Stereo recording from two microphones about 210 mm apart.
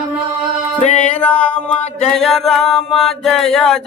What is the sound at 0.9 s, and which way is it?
Music, 5° left (ahead or behind).